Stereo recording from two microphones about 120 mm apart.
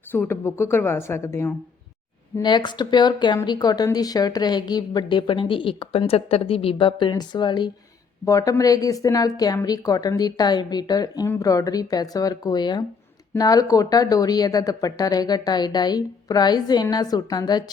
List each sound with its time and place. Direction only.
0.1 s a woman's voice: 20° left (ahead or behind)
2.4 s a woman's voice: 40° left (ahead or behind)
8.2 s a woman's voice: 30° left (ahead or behind)